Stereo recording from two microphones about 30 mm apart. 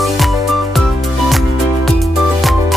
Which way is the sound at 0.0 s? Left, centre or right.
Centre.